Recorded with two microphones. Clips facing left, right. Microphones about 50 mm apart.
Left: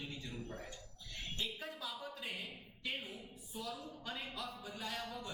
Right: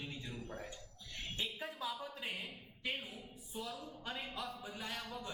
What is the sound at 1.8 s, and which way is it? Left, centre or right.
A woman's voice, right.